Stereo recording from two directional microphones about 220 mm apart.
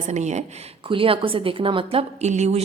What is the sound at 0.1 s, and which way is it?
A woman's voice, 30° right (ahead or behind).